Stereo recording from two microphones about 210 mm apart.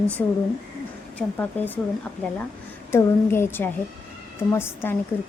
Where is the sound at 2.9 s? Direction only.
10° left (ahead or behind).